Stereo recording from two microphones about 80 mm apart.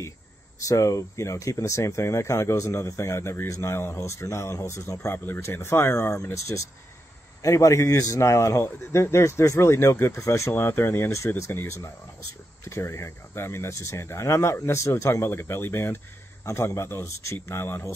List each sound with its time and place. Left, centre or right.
0.6 s speech: left
10.5 s speech: left